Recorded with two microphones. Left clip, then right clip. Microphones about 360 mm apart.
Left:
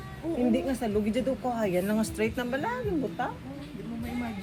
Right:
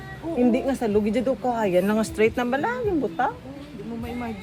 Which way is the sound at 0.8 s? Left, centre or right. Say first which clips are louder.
Right 6 dB; right.